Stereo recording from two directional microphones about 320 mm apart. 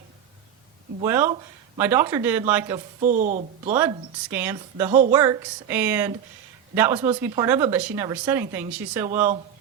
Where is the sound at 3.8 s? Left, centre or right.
Centre.